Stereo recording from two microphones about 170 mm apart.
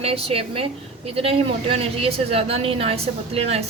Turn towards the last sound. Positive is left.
turn(degrees=-35)  # may be behind; listen again after turning